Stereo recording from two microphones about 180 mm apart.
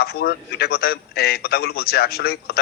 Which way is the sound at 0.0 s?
60° left (ahead or behind).